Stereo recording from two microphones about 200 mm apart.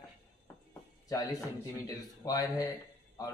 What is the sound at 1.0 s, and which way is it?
Speech, 20° left (ahead or behind).